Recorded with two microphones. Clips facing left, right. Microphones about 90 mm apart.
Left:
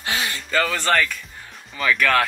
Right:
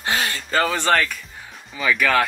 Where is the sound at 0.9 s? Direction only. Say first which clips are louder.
Right 1 dB; 5° right (ahead or behind).